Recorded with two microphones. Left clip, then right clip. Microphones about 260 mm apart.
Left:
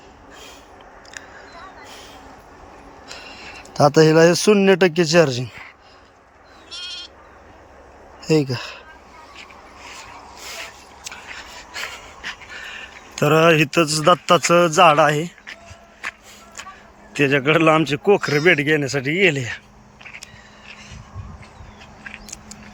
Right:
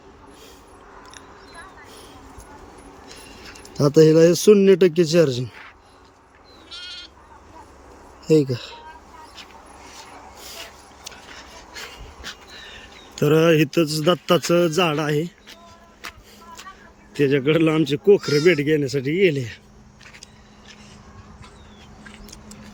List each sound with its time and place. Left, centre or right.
3.1 s speech: centre
6.7 s sheep: left
8.2 s speech: centre
11.1 s a sound: centre
12.2 s dog: centre
12.5 s a man's voice: centre
16.0 s a sound: centre
17.2 s a man's voice: centre